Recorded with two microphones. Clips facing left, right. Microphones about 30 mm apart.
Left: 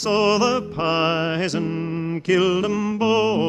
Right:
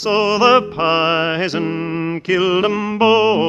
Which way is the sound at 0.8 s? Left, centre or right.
Right.